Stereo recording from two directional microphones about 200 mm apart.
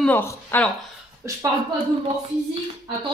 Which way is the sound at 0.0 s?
10° left (ahead or behind).